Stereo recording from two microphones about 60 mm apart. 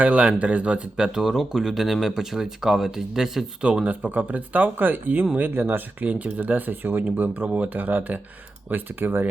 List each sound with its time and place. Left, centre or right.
0.0 s speech: right; by 3.4 s centre
3.8 s speech: right